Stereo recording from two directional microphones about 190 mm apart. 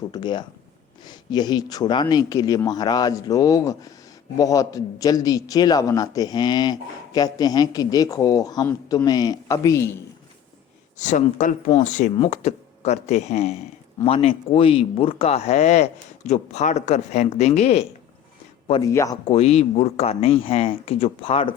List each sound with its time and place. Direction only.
0.1 s a man's voice: 25° left (ahead or behind)
10.9 s speech: 40° left (ahead or behind)
18.8 s speech: 15° left (ahead or behind)
19.3 s speech: 35° left (ahead or behind)